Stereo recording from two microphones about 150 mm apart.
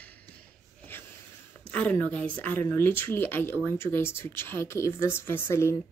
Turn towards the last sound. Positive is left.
turn(degrees=15)  # may be behind; listen again after turning